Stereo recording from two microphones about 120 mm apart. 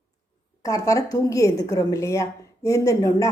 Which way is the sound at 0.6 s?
25° left (ahead or behind).